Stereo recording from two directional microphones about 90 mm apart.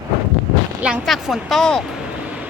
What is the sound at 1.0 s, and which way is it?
Speech, centre (ahead or behind).